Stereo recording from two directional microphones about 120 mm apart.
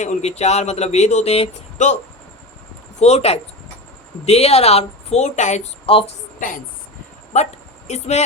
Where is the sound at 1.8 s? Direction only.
90° left.